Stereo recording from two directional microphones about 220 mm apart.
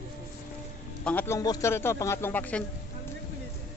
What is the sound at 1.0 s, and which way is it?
Speech, 10° left (ahead or behind).